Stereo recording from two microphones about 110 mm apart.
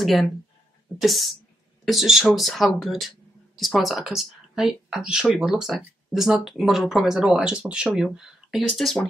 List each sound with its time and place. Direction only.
0.0 s speech: centre (ahead or behind)